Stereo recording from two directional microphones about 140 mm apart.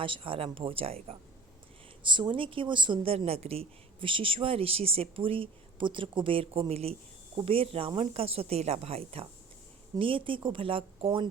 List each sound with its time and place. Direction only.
0.0 s a woman's voice: 40° right (ahead or behind)
2.0 s a woman's voice: 35° right (ahead or behind)